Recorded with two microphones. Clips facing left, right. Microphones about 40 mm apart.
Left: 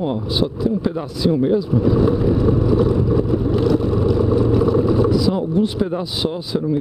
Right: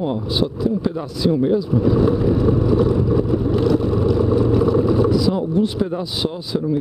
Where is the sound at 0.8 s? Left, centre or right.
Centre.